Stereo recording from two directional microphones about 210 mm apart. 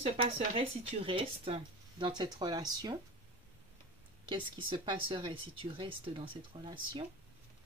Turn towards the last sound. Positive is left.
turn(degrees=-25)  # may be behind; listen again after turning